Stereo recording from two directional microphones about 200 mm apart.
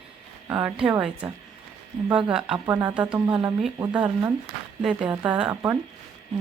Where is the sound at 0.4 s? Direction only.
5° right (ahead or behind).